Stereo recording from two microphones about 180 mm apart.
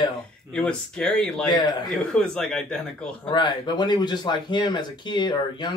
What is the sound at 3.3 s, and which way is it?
Speech, 25° left (ahead or behind).